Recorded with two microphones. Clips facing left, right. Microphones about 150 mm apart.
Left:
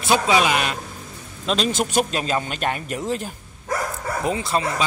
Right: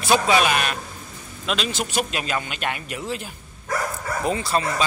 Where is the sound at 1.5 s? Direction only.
40° left (ahead or behind).